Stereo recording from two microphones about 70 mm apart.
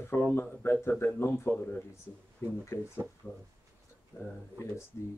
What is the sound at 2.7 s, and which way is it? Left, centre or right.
Speech, left.